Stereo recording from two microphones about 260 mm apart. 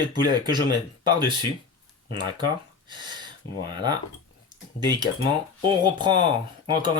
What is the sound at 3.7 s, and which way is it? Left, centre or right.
Cutlery, centre.